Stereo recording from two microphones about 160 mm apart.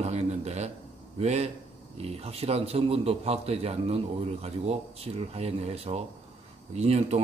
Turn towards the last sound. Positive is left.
turn(degrees=-40)  # may be behind; listen again after turning